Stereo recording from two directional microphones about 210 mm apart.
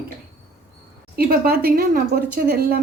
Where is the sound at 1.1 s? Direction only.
45° right (ahead or behind).